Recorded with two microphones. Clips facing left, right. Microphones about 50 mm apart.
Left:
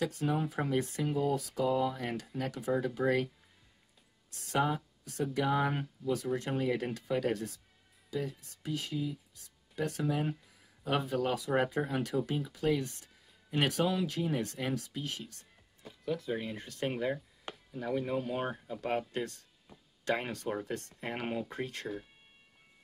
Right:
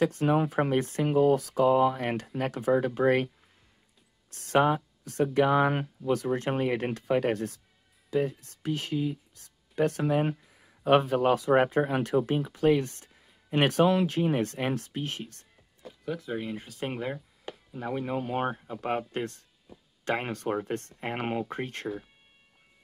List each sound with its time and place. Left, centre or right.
0.0 s speech: right
4.3 s speech: right
16.1 s speech: centre; by 21.8 s right